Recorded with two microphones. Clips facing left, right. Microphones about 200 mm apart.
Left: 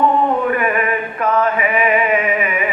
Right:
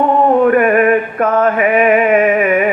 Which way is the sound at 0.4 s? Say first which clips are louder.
Right 8 dB; 50° right (ahead or behind).